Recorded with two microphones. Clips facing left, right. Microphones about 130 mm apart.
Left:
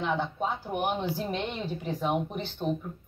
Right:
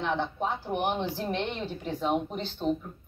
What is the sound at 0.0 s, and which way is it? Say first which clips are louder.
A woman's voice: even; 5° left (ahead or behind).